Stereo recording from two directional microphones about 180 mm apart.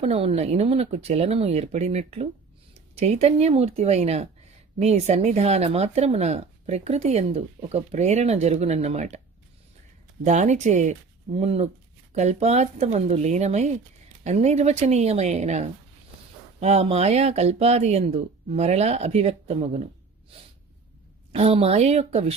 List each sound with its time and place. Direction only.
0.0 s speech: 35° right (ahead or behind)
10.2 s speech: 40° right (ahead or behind)
21.3 s speech: 35° right (ahead or behind)